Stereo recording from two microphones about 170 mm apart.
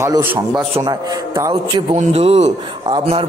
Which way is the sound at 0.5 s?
25° right (ahead or behind).